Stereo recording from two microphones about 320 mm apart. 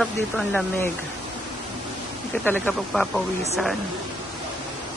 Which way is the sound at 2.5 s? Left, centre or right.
Centre.